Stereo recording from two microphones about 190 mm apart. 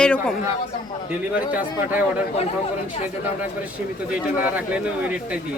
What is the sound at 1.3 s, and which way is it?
Speech, 10° right (ahead or behind).